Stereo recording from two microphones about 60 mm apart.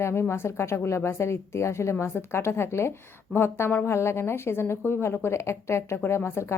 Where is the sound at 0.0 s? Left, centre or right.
Left.